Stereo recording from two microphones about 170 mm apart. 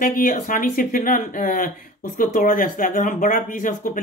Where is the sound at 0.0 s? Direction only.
55° left (ahead or behind).